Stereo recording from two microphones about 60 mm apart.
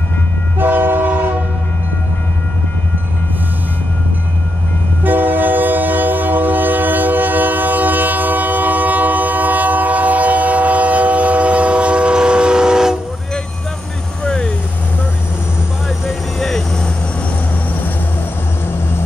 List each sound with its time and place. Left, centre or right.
0.6 s train: right
5.0 s train: right; by 12.9 s centre
14.2 s vehicle: centre
16.3 s vehicle: centre